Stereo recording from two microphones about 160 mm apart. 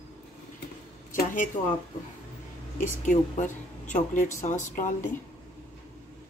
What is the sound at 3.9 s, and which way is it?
Speech, 50° left (ahead or behind).